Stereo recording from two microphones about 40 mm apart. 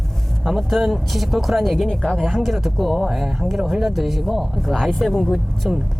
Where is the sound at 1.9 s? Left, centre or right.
Centre.